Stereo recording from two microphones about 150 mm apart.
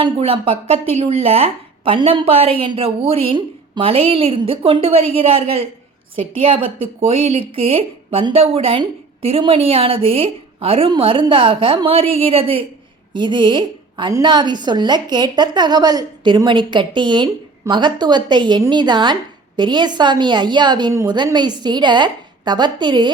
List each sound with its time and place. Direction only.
0.0 s a woman's voice: 40° right (ahead or behind)